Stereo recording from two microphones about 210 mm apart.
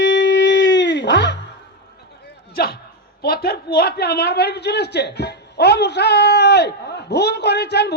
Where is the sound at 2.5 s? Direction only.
50° left (ahead or behind).